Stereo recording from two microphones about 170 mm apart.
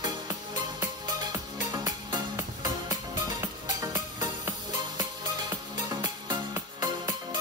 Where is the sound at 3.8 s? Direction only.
20° right (ahead or behind).